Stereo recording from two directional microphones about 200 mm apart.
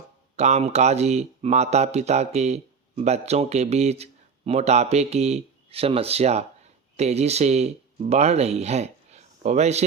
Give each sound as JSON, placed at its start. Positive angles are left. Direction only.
{"t": 0.3, "sound": "speech", "side_deg": -35}